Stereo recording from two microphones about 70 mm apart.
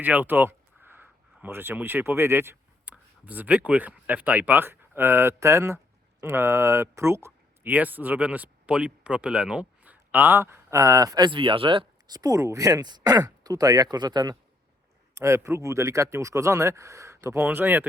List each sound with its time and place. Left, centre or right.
0.0 s speech: right
2.8 s speech: right
7.7 s speech: right
11.6 s speech: right
12.0 s speech: right
12.8 s speech: right
15.1 s speech: right